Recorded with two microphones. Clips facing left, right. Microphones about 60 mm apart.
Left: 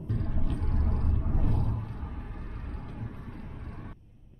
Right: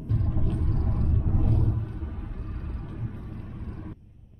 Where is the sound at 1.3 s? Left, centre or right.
Left.